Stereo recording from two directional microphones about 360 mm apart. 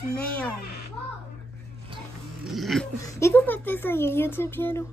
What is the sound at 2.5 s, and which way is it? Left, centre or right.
Speech, centre.